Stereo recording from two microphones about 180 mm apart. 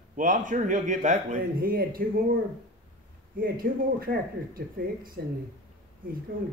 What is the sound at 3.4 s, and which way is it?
Speech, 55° right (ahead or behind).